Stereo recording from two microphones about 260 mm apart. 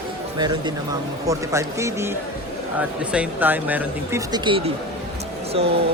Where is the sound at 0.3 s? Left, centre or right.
Centre.